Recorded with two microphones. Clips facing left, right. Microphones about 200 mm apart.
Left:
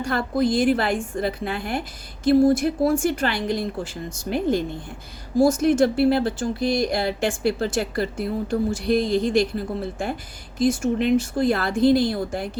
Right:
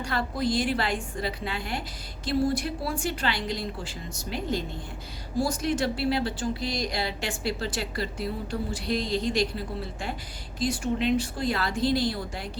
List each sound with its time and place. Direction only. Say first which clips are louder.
0.0 s speech: left 6 dB; 50° left (ahead or behind)